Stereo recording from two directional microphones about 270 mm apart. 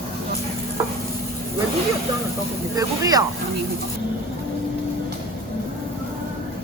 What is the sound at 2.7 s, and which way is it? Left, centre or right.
Speech, centre.